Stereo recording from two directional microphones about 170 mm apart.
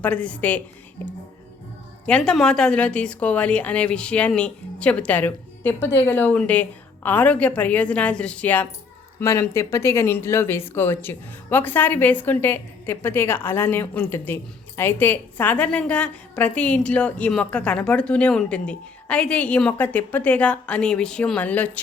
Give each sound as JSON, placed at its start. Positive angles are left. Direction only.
{"t": 0.0, "sound": "a woman's voice", "side_deg": 5}
{"t": 2.0, "sound": "a woman's voice", "side_deg": 5}